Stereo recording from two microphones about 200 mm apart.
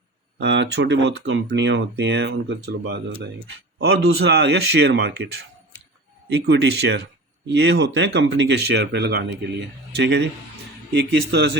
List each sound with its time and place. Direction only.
0.3 s speech: 60° right (ahead or behind)